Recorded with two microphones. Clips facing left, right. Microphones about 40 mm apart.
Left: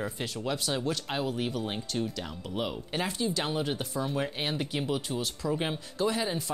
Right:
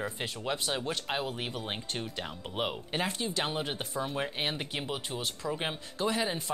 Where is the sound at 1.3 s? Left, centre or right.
Right.